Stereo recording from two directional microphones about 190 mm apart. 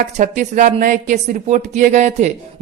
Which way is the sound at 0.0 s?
40° right (ahead or behind).